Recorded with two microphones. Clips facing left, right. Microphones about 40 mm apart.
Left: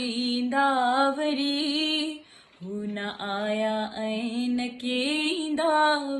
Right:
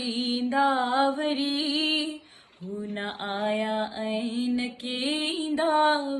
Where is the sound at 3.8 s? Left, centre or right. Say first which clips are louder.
Even; left.